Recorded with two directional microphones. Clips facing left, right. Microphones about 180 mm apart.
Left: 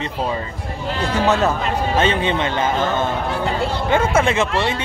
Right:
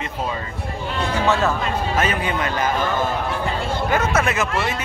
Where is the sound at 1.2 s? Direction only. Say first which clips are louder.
Left 2 dB; 20° left (ahead or behind).